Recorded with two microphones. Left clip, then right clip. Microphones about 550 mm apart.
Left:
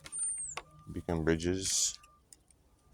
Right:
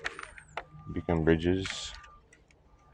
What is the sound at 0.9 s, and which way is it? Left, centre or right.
Speech, left.